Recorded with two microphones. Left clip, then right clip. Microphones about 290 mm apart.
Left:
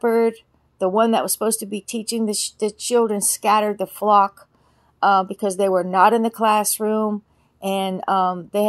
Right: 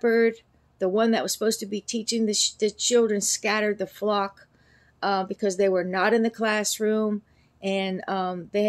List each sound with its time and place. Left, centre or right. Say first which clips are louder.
0.0 s speech: left 3 dB; centre